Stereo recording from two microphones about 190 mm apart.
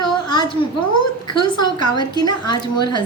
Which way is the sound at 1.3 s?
25° left (ahead or behind).